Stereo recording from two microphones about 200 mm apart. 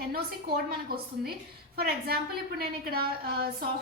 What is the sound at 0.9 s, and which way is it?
A woman's voice, 50° right (ahead or behind).